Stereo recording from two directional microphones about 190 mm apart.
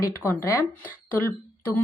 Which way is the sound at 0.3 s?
15° left (ahead or behind).